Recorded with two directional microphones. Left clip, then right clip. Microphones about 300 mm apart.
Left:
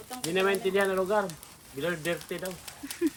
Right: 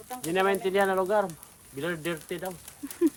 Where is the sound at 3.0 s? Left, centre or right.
Centre.